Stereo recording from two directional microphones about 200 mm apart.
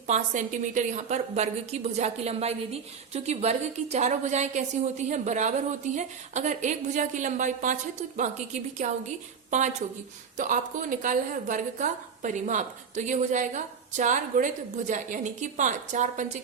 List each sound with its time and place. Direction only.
0.1 s a woman's voice: 40° right (ahead or behind)